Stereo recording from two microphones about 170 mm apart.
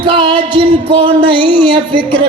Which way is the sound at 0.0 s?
30° right (ahead or behind).